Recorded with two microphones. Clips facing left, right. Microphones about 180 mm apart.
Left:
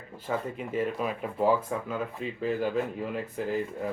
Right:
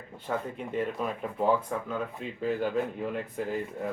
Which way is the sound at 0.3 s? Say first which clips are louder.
Left 1 dB; 5° left (ahead or behind).